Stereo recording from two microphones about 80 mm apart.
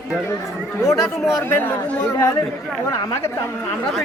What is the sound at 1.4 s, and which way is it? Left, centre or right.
Speech, left.